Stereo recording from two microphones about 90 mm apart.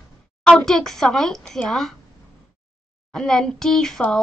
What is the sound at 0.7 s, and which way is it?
Speech, 5° left (ahead or behind).